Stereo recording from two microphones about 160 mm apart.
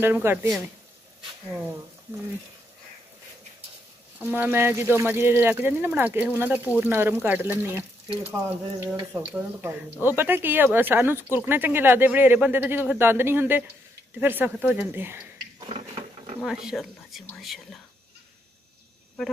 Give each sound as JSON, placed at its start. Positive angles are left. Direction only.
{"t": 0.0, "sound": "speech", "side_deg": -15}
{"t": 4.2, "sound": "speech", "side_deg": -10}
{"t": 15.6, "sound": "a sound", "side_deg": -35}
{"t": 16.3, "sound": "speech", "side_deg": -5}